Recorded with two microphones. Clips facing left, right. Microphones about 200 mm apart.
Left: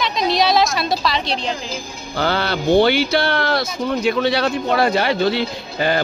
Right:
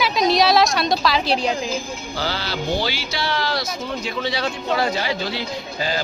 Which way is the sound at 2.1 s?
60° left (ahead or behind).